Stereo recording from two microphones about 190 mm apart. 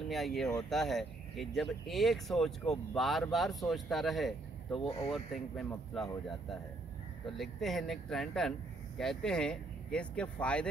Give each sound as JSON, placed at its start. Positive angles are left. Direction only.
{"t": 0.1, "sound": "speech", "side_deg": 0}
{"t": 4.8, "sound": "speech", "side_deg": 30}
{"t": 5.1, "sound": "speech", "side_deg": 0}